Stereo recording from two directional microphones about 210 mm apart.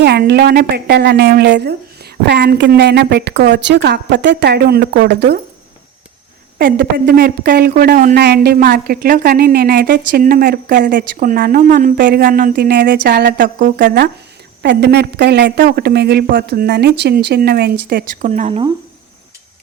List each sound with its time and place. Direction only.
0.0 s speech: 50° right (ahead or behind)
6.7 s speech: 45° right (ahead or behind)